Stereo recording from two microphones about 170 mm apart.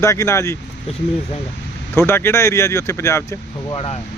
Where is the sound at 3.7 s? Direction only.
30° left (ahead or behind).